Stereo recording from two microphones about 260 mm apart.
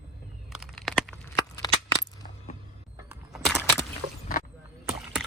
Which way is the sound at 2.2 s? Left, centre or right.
Left.